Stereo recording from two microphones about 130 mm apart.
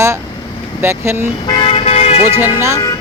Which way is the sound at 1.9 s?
55° left (ahead or behind).